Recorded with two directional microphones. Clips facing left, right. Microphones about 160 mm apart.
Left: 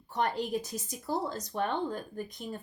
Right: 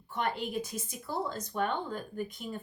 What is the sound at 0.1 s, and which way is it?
Speech, 40° left (ahead or behind).